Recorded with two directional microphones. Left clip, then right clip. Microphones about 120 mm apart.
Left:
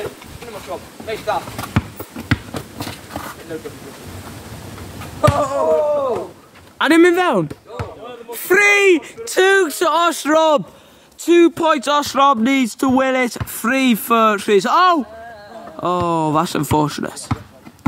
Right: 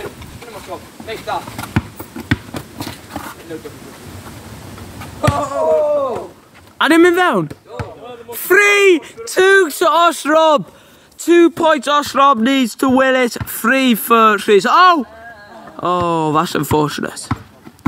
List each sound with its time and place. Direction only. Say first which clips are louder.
2.2 s a sound: right 1 dB; 15° right (ahead or behind)
5.2 s speech: left 1 dB; centre (ahead or behind)
6.8 s speech: right 2 dB; 15° right (ahead or behind)
9.4 s speech: right 3 dB; centre (ahead or behind)
11.2 s speech: right 2 dB; 15° right (ahead or behind)
11.8 s speech: right 2 dB; 10° left (ahead or behind)